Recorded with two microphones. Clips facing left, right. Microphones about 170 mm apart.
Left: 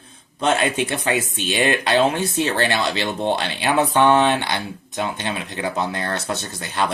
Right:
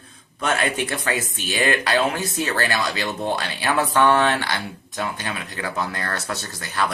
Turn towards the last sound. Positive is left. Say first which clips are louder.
# left 2 dB
turn(degrees=25)  # may be behind; listen again after turning